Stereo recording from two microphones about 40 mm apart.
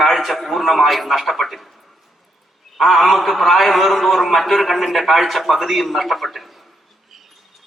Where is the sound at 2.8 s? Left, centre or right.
Centre.